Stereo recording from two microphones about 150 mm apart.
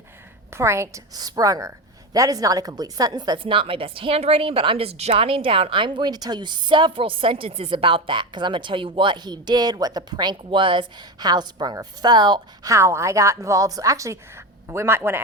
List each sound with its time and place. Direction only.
0.5 s a woman's voice: 20° right (ahead or behind)